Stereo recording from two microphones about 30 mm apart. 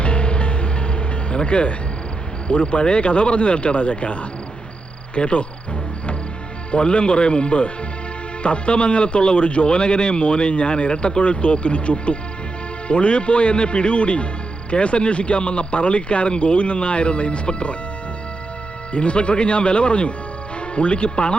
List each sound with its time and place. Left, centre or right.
0.0 s music: left
2.5 s a man's voice: left
6.7 s a man's voice: left
18.9 s a man's voice: left